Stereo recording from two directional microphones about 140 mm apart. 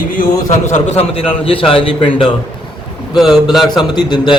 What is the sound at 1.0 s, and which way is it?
A man's voice, 45° left (ahead or behind).